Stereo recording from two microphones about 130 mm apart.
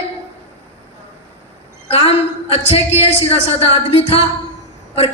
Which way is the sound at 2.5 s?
50° left (ahead or behind).